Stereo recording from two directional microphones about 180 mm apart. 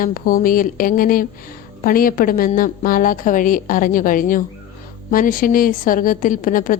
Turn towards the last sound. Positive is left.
turn(degrees=50)  # may be behind; listen again after turning